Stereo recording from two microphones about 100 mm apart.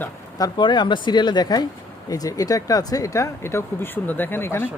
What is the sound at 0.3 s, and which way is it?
Speech, 40° left (ahead or behind).